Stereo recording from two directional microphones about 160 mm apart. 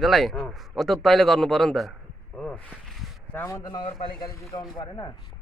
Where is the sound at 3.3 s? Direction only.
20° left (ahead or behind).